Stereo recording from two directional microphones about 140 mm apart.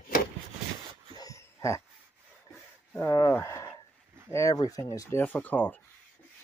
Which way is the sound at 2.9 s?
20° left (ahead or behind).